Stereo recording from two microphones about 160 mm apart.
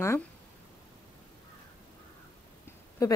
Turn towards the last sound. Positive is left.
turn(degrees=20)  # may be behind; listen again after turning